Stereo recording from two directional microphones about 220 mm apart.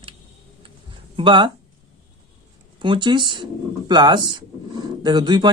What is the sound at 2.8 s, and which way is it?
Speech, 20° right (ahead or behind).